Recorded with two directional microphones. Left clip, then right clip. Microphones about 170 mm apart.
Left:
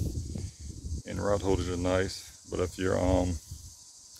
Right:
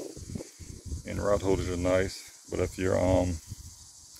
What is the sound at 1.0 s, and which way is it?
Cricket, 10° left (ahead or behind).